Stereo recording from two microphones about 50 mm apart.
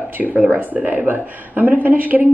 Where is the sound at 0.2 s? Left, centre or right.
Right.